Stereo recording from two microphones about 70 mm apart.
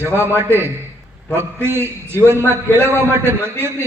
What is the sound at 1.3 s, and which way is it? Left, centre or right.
A man's voice, right.